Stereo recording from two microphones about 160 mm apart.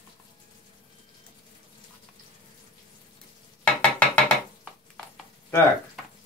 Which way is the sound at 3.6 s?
10° left (ahead or behind).